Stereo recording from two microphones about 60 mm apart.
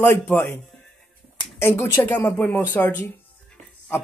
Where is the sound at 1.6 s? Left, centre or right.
Left.